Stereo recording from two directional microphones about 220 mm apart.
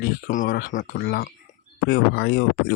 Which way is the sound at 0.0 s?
40° left (ahead or behind).